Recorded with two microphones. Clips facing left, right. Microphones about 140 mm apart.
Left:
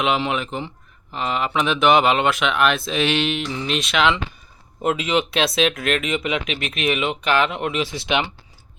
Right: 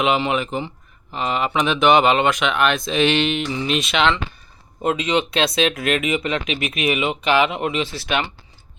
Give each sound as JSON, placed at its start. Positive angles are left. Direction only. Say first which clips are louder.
{"t": 0.0, "sound": "speech", "louder": "right 2 dB", "side_deg": 0}
{"t": 7.9, "sound": "speech", "louder": "left 1 dB", "side_deg": 15}